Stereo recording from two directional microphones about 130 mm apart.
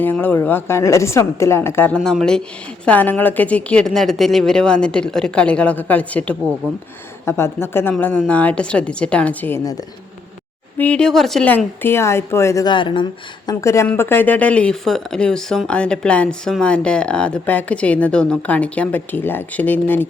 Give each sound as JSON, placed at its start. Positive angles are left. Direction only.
{"t": 0.0, "sound": "a woman's voice", "side_deg": 15}
{"t": 2.0, "sound": "a woman's voice", "side_deg": 0}
{"t": 10.8, "sound": "speech", "side_deg": 10}
{"t": 12.6, "sound": "speech", "side_deg": 40}
{"t": 13.5, "sound": "a woman's voice", "side_deg": 25}